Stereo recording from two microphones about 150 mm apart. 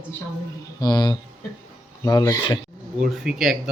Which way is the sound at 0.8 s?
30° left (ahead or behind).